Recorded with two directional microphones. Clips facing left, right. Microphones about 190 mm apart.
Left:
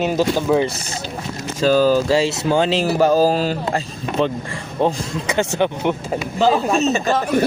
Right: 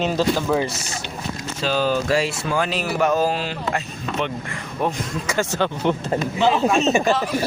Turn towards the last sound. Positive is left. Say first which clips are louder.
# left 5 dB
turn(degrees=55)  # may be behind; listen again after turning